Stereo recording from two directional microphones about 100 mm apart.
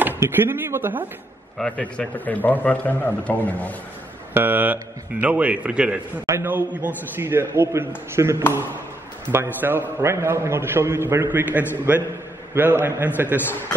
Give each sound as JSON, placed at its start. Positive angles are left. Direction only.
{"t": 0.0, "sound": "speech", "side_deg": -20}
{"t": 1.6, "sound": "a man's voice", "side_deg": 15}
{"t": 4.3, "sound": "a man's voice", "side_deg": -20}
{"t": 6.2, "sound": "a man's voice", "side_deg": -25}